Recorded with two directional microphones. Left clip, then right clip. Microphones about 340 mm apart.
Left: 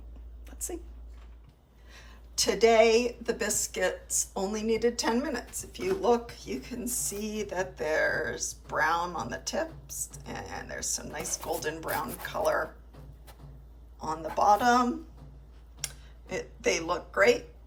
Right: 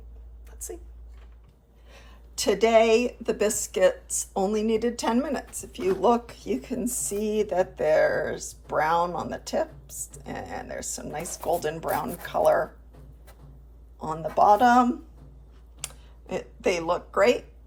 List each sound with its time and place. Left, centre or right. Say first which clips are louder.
1.9 s speech: right 1 dB; centre
14.0 s speech: right 5 dB; centre
15.8 s a sound: even; centre